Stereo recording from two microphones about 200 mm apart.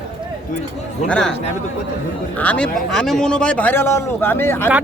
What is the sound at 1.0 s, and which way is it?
Speech, 5° left (ahead or behind).